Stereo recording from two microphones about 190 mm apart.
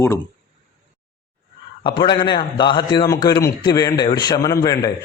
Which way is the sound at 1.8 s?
25° left (ahead or behind).